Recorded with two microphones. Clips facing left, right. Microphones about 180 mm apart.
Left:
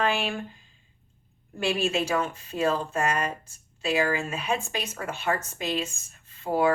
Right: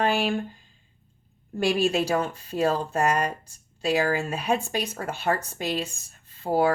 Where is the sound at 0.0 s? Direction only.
35° right (ahead or behind).